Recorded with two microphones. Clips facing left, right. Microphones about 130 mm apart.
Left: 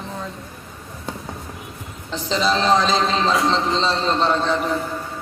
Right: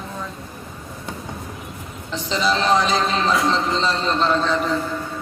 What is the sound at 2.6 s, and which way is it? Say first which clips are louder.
A man's voice: left 1 dB; 30° left (ahead or behind).